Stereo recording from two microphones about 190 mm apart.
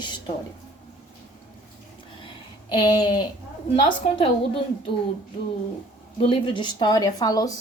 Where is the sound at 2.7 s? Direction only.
20° left (ahead or behind).